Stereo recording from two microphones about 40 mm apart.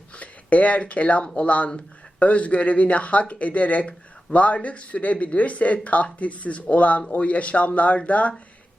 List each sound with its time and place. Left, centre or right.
0.2 s speech: left